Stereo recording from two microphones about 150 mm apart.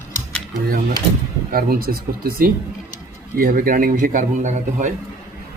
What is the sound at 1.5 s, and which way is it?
A man's voice, 75° right (ahead or behind).